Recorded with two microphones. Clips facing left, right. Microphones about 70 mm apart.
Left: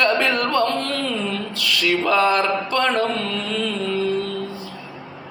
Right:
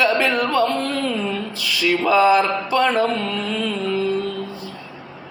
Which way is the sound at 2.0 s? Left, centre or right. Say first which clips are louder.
Right 4 dB; centre.